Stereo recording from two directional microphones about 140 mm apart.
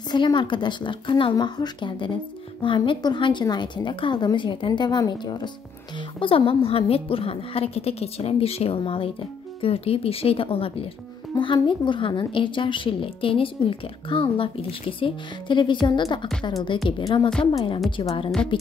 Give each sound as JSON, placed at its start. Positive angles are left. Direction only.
{"t": 0.1, "sound": "a woman's voice", "side_deg": 35}